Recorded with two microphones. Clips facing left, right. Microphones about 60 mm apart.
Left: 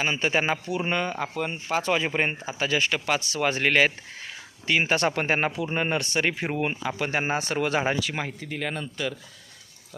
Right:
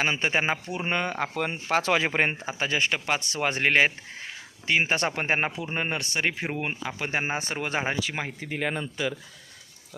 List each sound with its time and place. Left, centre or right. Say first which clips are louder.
0.0 s speech: left 1 dB; right
0.9 s speech: right 2 dB; right
1.7 s speech: right 1 dB; right
2.5 s speech: left 1 dB; right; by 9.1 s centre